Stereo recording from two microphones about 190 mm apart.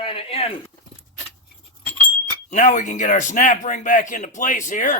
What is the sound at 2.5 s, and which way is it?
A man's voice, 40° left (ahead or behind).